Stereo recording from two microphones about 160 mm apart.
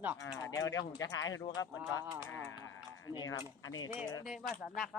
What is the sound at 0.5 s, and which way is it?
Speech, 20° left (ahead or behind).